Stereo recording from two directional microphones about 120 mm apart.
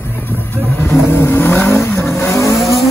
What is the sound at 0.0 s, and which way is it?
Vehicle, 15° left (ahead or behind).